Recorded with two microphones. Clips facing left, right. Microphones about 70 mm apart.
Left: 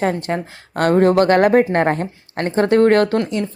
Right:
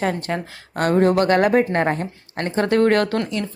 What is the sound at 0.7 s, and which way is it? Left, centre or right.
A woman's voice, left.